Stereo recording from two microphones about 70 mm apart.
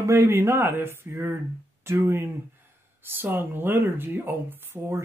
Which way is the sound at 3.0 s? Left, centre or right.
Right.